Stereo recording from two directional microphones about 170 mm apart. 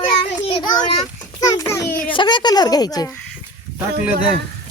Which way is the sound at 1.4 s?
20° left (ahead or behind).